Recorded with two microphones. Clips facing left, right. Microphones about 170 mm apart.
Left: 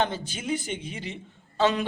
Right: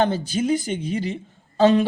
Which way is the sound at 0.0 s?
40° right (ahead or behind).